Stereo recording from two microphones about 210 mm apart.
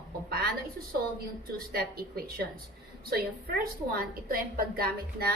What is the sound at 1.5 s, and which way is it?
A woman's voice, 45° right (ahead or behind).